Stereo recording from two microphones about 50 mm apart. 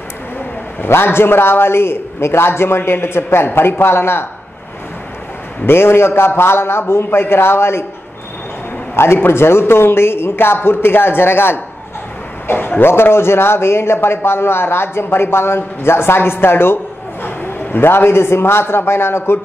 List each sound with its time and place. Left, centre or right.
0.7 s speech: left
5.7 s speech: left
8.9 s a man's voice: left